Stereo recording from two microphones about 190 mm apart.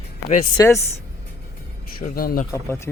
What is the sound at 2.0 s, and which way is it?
Speech, 50° left (ahead or behind).